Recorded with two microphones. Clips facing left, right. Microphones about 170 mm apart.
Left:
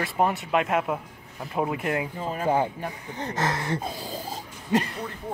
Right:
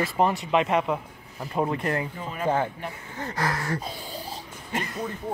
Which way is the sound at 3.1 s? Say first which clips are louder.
Left 1 dB; 20° left (ahead or behind).